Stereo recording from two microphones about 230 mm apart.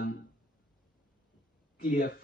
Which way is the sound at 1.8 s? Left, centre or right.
Left.